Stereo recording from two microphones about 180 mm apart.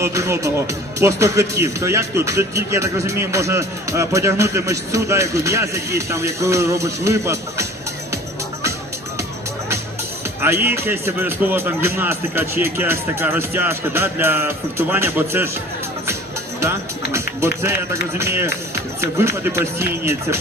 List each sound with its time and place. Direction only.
0.0 s speech: 15° right (ahead or behind)
10.4 s speech: 10° right (ahead or behind)
17.1 s music: 15° right (ahead or behind)
18.2 s speech: 15° right (ahead or behind)